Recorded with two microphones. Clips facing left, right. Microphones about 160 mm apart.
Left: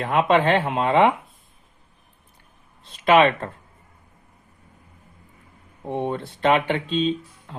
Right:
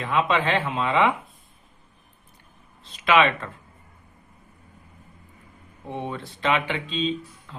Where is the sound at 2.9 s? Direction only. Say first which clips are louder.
Left 4 dB; 50° left (ahead or behind).